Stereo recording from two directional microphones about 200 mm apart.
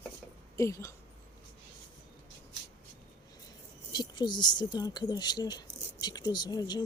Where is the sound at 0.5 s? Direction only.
15° left (ahead or behind).